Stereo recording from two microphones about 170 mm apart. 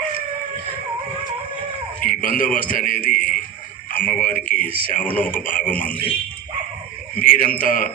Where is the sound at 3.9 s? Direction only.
55° left (ahead or behind).